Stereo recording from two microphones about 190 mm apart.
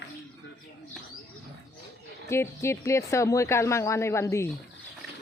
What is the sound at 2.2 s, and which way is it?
A woman's voice, 15° left (ahead or behind).